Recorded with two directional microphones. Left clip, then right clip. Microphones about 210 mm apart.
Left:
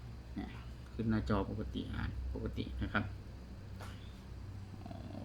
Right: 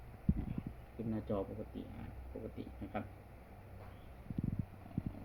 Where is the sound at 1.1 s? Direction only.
20° left (ahead or behind).